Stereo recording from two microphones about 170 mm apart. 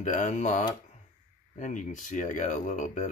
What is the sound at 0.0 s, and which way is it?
Speech, 45° left (ahead or behind).